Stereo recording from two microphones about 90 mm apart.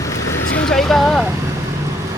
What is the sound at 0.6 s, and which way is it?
Speech, 5° left (ahead or behind).